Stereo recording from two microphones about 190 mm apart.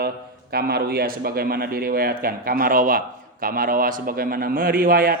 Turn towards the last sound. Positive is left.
turn(degrees=-50)  # may be behind; listen again after turning